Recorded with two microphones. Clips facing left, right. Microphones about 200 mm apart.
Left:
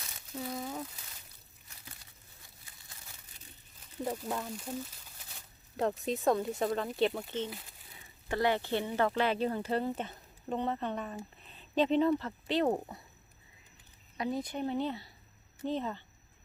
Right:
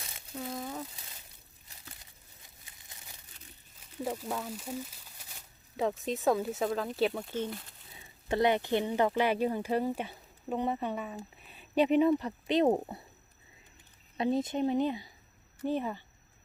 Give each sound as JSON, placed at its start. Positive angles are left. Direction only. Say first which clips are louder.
{"t": 0.4, "sound": "a sound", "louder": "even", "side_deg": 0}
{"t": 4.2, "sound": "speech", "louder": "even", "side_deg": 0}
{"t": 6.1, "sound": "speech", "louder": "right 1 dB", "side_deg": 0}
{"t": 7.9, "sound": "speech", "louder": "right 4 dB", "side_deg": -20}
{"t": 14.2, "sound": "speech", "louder": "right 5 dB", "side_deg": -25}